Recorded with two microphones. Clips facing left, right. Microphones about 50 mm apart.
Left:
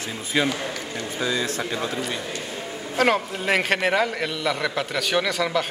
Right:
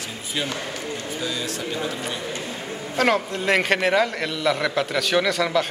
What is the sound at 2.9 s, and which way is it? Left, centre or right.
A man's voice, centre.